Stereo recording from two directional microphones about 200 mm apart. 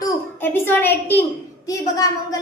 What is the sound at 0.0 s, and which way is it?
A woman's voice, 10° left (ahead or behind).